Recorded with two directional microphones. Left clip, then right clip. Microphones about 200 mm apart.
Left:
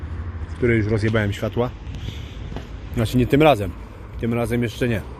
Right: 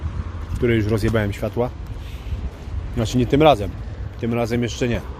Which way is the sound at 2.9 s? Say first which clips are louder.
Even; centre (ahead or behind).